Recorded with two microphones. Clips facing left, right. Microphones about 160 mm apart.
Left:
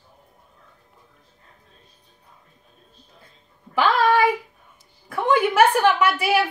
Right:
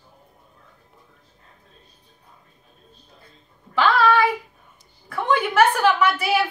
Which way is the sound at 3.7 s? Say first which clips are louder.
Even; 15° left (ahead or behind).